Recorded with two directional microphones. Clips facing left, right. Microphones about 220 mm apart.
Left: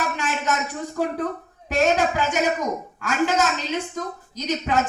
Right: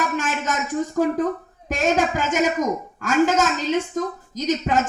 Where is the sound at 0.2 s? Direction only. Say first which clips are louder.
Right 1 dB; 45° right (ahead or behind).